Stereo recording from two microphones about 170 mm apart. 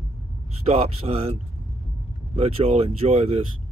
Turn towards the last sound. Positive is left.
turn(degrees=-35)  # may be behind; listen again after turning